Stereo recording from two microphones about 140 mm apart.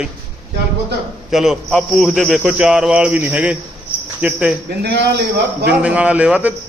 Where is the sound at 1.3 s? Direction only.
5° right (ahead or behind).